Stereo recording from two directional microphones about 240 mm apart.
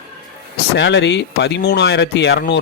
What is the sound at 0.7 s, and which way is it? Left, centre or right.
A man's voice, left.